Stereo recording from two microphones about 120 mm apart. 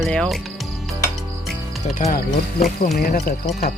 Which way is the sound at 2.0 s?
90° left.